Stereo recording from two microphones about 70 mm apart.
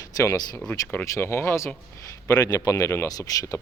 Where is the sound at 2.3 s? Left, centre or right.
Left.